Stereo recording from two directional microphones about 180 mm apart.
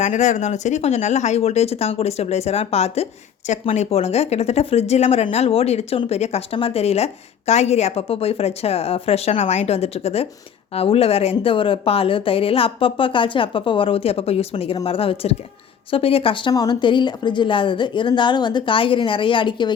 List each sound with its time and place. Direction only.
0.0 s speech: 40° left (ahead or behind); by 19.7 s 25° left (ahead or behind)